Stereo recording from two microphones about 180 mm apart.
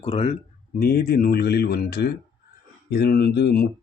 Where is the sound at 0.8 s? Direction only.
55° left (ahead or behind).